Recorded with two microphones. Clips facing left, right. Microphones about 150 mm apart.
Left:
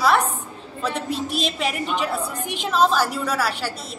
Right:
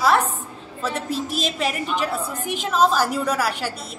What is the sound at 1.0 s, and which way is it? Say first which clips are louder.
A woman's voice: even; 40° right (ahead or behind).